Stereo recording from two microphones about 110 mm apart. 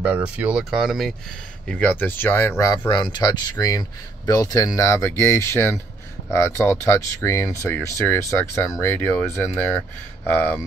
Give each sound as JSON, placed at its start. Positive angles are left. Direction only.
{"t": 0.0, "sound": "speech", "side_deg": -15}
{"t": 1.7, "sound": "speech", "side_deg": 15}
{"t": 2.9, "sound": "speech", "side_deg": 40}